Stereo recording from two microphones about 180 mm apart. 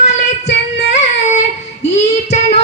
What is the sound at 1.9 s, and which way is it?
Child singing, 40° left (ahead or behind).